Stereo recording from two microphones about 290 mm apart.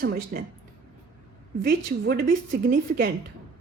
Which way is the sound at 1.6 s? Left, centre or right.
Right.